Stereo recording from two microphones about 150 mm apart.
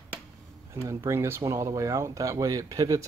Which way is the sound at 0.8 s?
20° right (ahead or behind).